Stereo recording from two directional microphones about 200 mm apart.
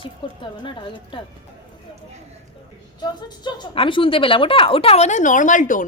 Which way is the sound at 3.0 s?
20° left (ahead or behind).